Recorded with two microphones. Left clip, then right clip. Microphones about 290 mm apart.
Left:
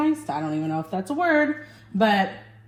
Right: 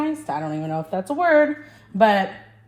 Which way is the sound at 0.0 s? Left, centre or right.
Right.